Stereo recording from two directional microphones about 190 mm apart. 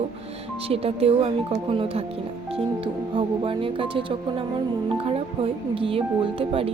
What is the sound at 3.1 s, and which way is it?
Speech, 25° right (ahead or behind).